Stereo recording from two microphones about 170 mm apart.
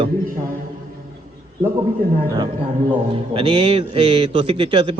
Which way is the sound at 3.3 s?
35° right (ahead or behind).